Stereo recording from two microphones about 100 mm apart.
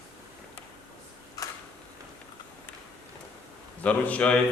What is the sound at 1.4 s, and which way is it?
Tick-tock, 35° left (ahead or behind).